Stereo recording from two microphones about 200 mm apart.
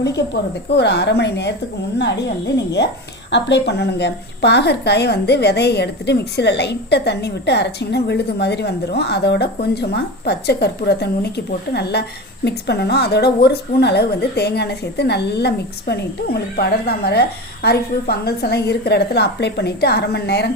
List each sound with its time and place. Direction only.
0.0 s a woman's voice: 60° left (ahead or behind)
3.3 s a woman's voice: 60° left (ahead or behind)